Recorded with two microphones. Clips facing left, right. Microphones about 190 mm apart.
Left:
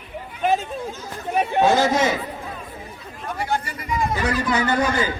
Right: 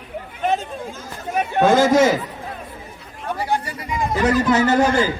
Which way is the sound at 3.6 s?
35° right (ahead or behind).